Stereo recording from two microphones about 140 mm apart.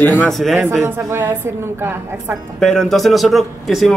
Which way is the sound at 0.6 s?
15° right (ahead or behind).